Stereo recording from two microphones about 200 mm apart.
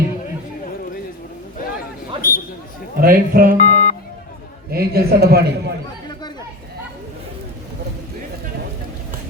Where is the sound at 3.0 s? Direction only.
45° right (ahead or behind).